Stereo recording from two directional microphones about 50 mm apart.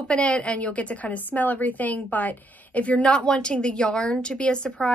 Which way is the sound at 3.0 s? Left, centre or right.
Centre.